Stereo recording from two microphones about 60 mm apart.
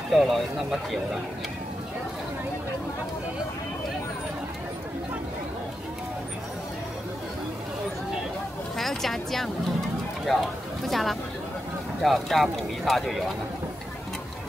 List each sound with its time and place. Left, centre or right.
0.1 s speech: centre
8.7 s a sound: centre
10.2 s speech: centre